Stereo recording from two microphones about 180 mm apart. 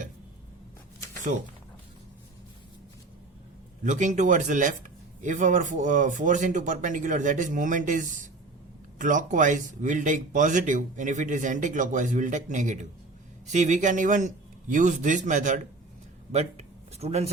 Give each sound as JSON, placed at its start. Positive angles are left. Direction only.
{"t": 3.8, "sound": "speech", "side_deg": -45}